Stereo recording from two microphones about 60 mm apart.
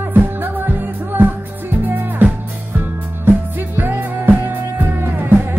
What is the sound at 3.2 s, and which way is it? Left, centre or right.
Music, right.